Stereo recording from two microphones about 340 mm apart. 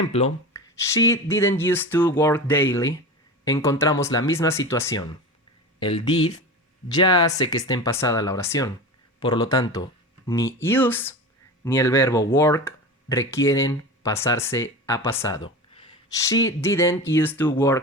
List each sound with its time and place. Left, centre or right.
0.1 s speech: centre